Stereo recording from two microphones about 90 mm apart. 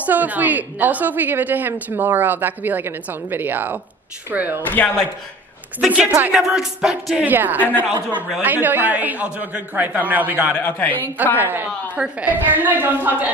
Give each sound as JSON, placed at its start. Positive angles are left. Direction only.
{"t": 0.0, "sound": "a woman's voice", "side_deg": -20}
{"t": 4.6, "sound": "speech", "side_deg": 20}
{"t": 5.9, "sound": "a woman's voice", "side_deg": -15}
{"t": 6.3, "sound": "speech", "side_deg": -5}
{"t": 7.2, "sound": "a woman's voice", "side_deg": -20}
{"t": 10.6, "sound": "speech", "side_deg": 20}
{"t": 11.3, "sound": "a woman's voice", "side_deg": -20}